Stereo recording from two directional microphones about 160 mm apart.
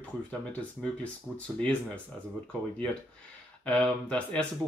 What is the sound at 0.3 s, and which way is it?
Speech, 10° left (ahead or behind).